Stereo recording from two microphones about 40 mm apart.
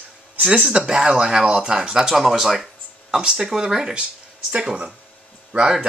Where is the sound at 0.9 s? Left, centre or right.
Centre.